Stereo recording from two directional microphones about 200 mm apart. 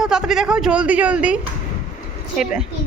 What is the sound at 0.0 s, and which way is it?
Speech, centre (ahead or behind).